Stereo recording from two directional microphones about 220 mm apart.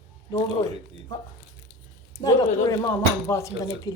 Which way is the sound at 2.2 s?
15° left (ahead or behind).